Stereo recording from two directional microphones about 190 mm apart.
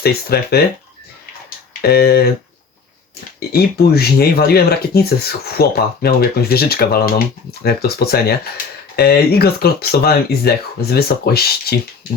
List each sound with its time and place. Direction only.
0.0 s speech: 55° left (ahead or behind)
1.8 s speech: 55° left (ahead or behind)
3.5 s speech: 55° left (ahead or behind)